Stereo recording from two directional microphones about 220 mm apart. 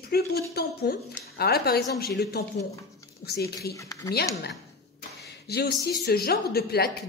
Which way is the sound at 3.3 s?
45° left (ahead or behind).